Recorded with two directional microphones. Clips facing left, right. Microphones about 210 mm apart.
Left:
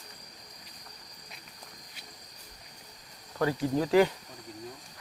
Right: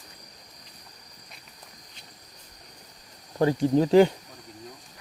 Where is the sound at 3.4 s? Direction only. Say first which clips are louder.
Right 6 dB; 25° right (ahead or behind).